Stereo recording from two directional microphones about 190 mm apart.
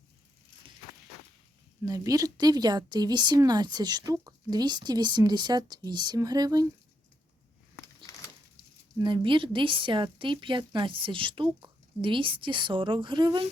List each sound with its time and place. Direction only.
1.8 s speech: 20° right (ahead or behind)
9.0 s speech: 25° right (ahead or behind)